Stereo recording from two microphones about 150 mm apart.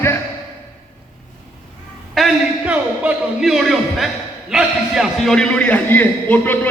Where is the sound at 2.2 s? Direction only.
5° right (ahead or behind).